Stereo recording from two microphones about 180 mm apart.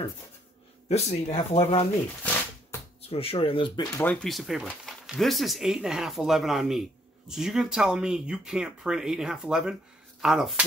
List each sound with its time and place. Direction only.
0.8 s speech: 35° left (ahead or behind)
3.0 s speech: 35° left (ahead or behind)
4.1 s speech: centre (ahead or behind)